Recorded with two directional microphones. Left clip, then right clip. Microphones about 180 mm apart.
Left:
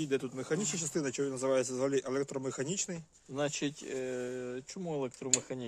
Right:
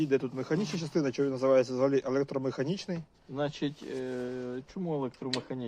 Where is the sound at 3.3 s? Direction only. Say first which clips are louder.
Right 1 dB; 40° left (ahead or behind).